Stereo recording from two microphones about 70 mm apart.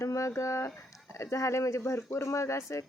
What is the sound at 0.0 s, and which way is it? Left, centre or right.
Speech, left.